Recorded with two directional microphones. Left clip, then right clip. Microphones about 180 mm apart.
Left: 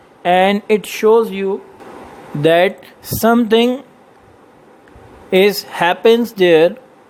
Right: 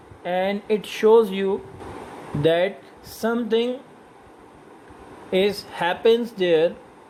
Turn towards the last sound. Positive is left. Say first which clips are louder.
# left 9 dB
turn(degrees=35)  # may be behind; listen again after turning